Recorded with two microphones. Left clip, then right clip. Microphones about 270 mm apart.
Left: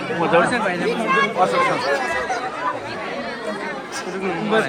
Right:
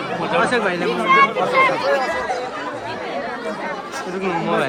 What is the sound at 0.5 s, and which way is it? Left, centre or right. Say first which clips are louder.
Speech: right 2 dB; centre.